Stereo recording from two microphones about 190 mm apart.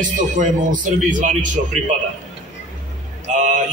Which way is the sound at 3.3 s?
40° right (ahead or behind).